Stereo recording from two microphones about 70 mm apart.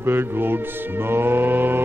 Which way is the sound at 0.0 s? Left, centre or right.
Right.